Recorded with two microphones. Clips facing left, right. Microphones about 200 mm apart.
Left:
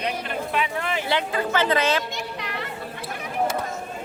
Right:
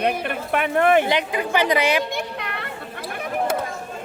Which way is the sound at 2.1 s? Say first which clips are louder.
Right 3 dB; 55° right (ahead or behind).